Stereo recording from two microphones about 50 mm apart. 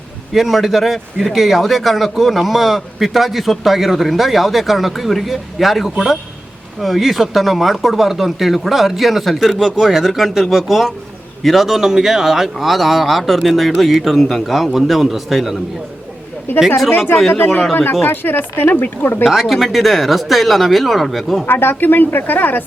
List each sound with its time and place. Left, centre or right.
0.3 s speech: centre
16.5 s speech: left
18.0 s speech: left
19.3 s speech: centre
21.4 s speech: left